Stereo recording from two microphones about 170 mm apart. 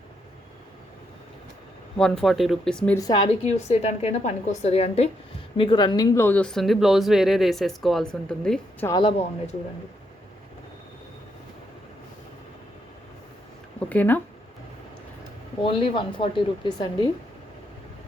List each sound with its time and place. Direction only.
2.0 s speech: 5° left (ahead or behind)
3.4 s a woman's voice: 40° left (ahead or behind)
5.5 s speech: 30° left (ahead or behind); by 8.9 s 5° left (ahead or behind)
8.9 s speech: 30° left (ahead or behind)
13.7 s speech: 10° left (ahead or behind)
15.6 s speech: 30° left (ahead or behind)